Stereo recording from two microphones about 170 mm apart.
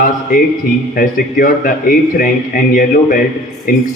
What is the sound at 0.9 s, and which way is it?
A man's voice, 55° left (ahead or behind).